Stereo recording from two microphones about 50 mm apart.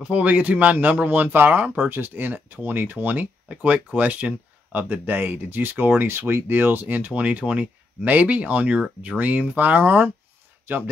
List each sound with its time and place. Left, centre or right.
0.0 s speech: right
7.1 s speech: right